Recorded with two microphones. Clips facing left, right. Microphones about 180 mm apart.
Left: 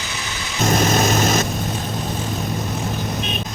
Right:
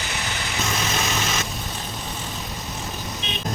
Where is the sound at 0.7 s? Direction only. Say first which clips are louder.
Left 11 dB; 45° left (ahead or behind).